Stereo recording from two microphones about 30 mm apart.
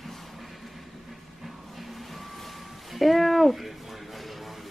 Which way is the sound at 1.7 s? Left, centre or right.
Centre.